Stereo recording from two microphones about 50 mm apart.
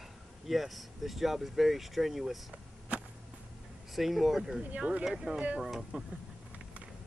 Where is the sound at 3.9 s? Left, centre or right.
Centre.